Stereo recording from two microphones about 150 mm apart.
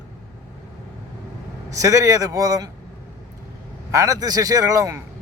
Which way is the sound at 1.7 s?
20° right (ahead or behind).